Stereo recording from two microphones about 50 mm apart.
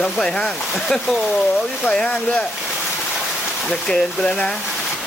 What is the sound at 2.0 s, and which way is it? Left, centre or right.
Speech, left.